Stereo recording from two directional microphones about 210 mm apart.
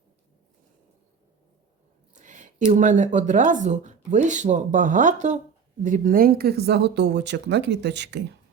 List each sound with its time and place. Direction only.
2.1 s speech: 35° right (ahead or behind); by 8.2 s 55° right (ahead or behind)